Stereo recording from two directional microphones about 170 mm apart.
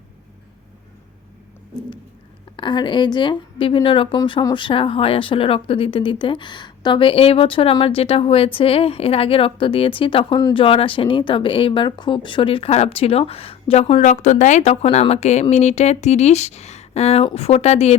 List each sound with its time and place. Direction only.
2.6 s speech: 30° left (ahead or behind)